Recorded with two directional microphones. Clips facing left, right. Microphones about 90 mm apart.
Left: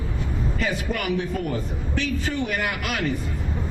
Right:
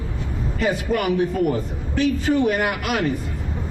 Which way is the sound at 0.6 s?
25° right (ahead or behind).